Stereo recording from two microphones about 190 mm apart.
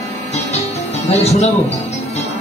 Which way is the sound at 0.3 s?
35° left (ahead or behind).